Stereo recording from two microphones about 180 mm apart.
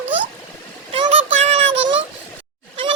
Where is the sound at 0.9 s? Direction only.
35° right (ahead or behind).